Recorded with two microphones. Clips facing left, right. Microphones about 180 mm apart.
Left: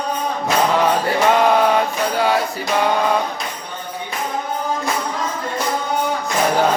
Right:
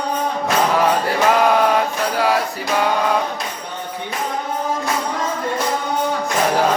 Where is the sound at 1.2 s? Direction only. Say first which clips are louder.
Even; centre (ahead or behind).